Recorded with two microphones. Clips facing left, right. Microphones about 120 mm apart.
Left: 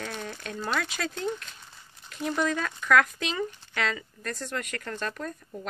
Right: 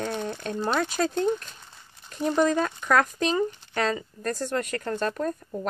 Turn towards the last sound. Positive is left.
turn(degrees=-35)  # may be behind; listen again after turning